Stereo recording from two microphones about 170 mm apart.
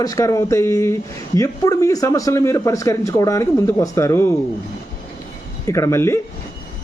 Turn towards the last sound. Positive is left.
turn(degrees=15)  # may be behind; listen again after turning